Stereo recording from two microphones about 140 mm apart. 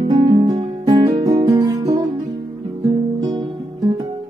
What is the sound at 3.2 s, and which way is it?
Music, 25° right (ahead or behind).